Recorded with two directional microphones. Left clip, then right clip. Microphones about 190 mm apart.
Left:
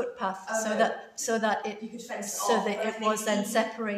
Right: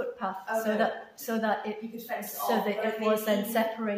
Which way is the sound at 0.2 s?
35° left (ahead or behind).